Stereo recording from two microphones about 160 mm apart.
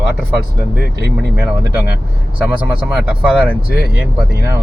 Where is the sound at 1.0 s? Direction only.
90° right.